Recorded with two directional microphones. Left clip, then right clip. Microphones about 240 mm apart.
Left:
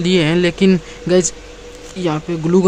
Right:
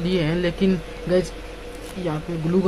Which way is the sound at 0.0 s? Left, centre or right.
Left.